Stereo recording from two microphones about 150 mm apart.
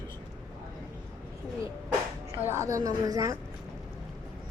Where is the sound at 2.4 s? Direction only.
15° right (ahead or behind).